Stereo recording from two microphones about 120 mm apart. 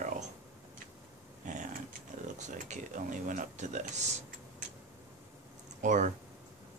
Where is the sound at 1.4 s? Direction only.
90° right.